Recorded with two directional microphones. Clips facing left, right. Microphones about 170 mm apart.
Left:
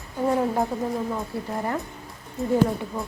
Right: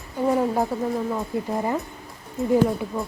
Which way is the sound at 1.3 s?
15° right (ahead or behind).